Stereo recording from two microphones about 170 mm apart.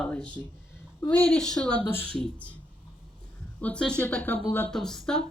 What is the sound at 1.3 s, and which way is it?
Speech, 5° left (ahead or behind).